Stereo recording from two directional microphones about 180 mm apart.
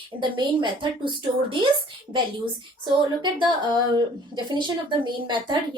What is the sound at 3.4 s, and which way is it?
A woman's voice, 25° right (ahead or behind).